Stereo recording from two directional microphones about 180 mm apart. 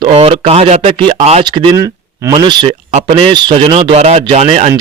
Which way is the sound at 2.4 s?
25° right (ahead or behind).